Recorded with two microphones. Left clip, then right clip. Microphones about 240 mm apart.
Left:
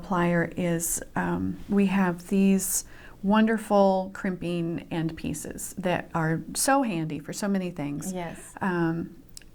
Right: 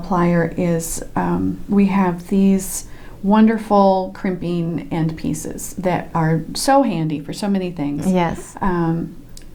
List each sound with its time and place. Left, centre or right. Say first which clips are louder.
0.0 s speech: right 7 dB; left
8.0 s a woman's voice: right 16 dB; right
8.5 s speech: right 5 dB; left